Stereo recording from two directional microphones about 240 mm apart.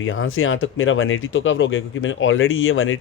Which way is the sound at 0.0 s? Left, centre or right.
Left.